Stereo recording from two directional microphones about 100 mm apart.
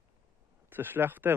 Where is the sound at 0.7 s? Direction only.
20° right (ahead or behind).